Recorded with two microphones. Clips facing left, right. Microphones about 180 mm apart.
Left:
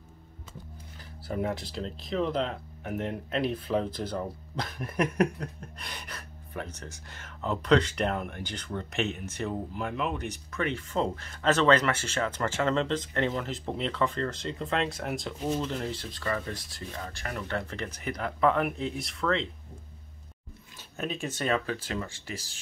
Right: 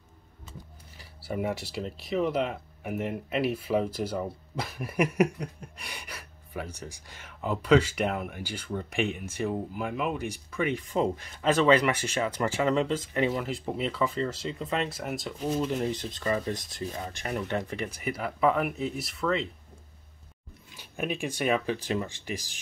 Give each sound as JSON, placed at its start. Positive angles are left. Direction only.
{"t": 0.9, "sound": "speech", "side_deg": -10}
{"t": 15.6, "sound": "speech", "side_deg": -15}
{"t": 20.7, "sound": "speech", "side_deg": -10}